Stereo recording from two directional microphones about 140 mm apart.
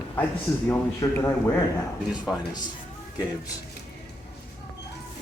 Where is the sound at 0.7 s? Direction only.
20° left (ahead or behind).